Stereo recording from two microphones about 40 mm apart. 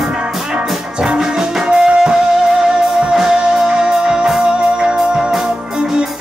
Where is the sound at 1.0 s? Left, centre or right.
Centre.